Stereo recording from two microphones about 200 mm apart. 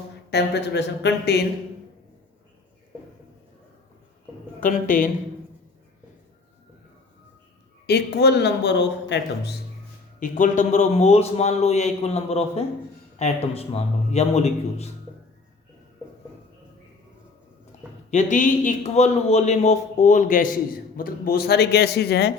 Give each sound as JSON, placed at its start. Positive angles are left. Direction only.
{"t": 0.3, "sound": "a man's voice", "side_deg": 55}
{"t": 4.6, "sound": "a man's voice", "side_deg": 40}
{"t": 7.9, "sound": "a man's voice", "side_deg": 55}
{"t": 10.2, "sound": "a man's voice", "side_deg": 40}
{"t": 18.1, "sound": "a man's voice", "side_deg": 35}